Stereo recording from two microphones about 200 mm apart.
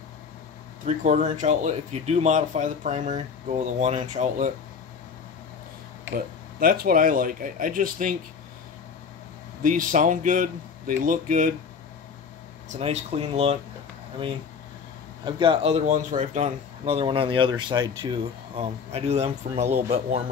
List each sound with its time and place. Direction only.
0.8 s speech: 35° right (ahead or behind)
6.1 s speech: 45° right (ahead or behind)
9.6 s speech: 40° right (ahead or behind)
12.6 s speech: 35° right (ahead or behind)
15.2 s a man's voice: 25° right (ahead or behind)